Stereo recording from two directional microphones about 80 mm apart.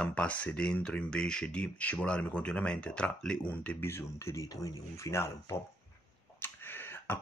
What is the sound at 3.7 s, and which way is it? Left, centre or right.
Speech, left.